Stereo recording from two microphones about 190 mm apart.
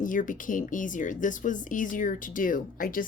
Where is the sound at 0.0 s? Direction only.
45° left (ahead or behind).